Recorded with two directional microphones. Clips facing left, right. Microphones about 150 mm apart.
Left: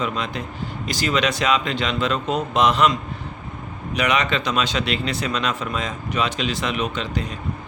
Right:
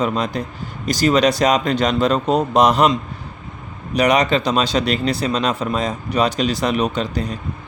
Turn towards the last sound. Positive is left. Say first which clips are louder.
# right 4 dB
turn(degrees=-35)  # may be behind; listen again after turning